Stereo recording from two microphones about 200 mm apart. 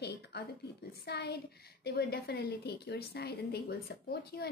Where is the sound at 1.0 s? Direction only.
55° left (ahead or behind).